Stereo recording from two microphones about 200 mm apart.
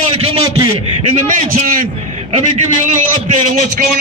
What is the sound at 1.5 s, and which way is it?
Speech, 45° right (ahead or behind).